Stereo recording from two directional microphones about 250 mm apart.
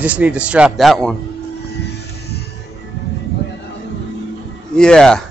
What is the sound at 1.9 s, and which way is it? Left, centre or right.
Music, left.